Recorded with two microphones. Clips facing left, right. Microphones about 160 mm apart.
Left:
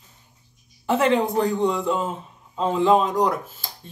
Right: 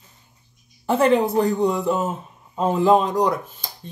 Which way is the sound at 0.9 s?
35° right (ahead or behind).